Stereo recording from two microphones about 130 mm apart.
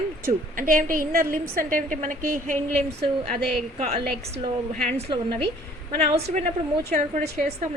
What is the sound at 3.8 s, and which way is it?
A woman's voice, 55° right (ahead or behind).